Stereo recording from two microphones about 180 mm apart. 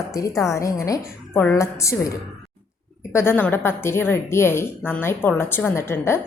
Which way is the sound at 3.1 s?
10° left (ahead or behind).